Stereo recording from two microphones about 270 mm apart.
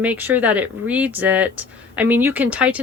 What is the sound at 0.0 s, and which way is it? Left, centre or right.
Speech, centre.